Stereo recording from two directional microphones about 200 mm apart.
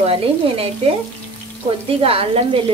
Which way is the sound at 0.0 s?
30° right (ahead or behind).